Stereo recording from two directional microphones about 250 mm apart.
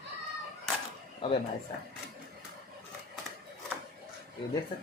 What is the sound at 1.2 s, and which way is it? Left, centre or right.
Speech, left.